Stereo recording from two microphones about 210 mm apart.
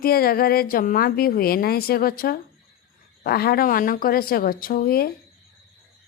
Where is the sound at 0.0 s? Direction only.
45° left (ahead or behind).